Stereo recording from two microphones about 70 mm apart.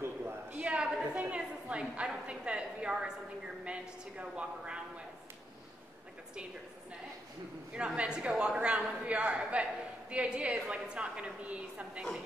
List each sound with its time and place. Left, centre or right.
0.6 s a woman's voice: centre
3.6 s a sound: centre
7.7 s a man's voice: centre